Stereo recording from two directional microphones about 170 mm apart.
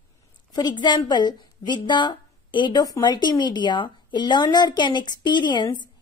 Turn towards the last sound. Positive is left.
turn(degrees=25)  # may be behind; listen again after turning